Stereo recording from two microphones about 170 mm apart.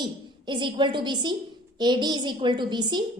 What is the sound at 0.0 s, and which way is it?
A woman's voice, 25° right (ahead or behind).